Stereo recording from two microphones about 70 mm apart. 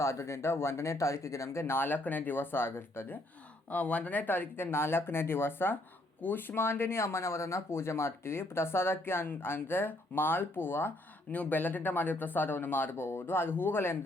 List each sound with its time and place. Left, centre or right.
0.0 s speech: left
3.7 s speech: left